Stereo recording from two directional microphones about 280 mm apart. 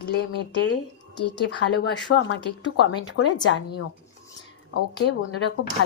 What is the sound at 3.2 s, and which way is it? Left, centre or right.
Speech, left.